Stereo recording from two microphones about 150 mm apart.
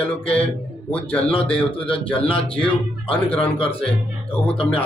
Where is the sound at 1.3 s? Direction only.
35° left (ahead or behind).